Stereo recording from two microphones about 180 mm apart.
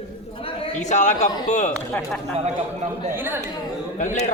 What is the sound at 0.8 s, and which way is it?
Speech, 40° left (ahead or behind).